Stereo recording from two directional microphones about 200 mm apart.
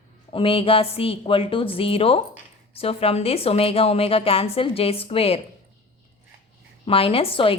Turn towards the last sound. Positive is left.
turn(degrees=25)  # may be behind; listen again after turning